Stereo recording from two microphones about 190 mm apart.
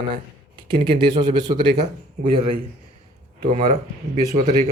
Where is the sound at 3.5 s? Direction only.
35° right (ahead or behind).